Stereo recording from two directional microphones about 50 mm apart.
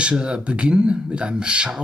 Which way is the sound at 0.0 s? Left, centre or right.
Centre.